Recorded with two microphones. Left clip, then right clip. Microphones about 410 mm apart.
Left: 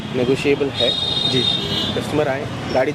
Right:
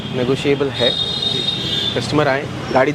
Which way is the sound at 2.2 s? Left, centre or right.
Right.